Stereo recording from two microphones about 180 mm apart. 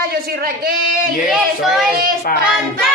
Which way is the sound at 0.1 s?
60° right (ahead or behind).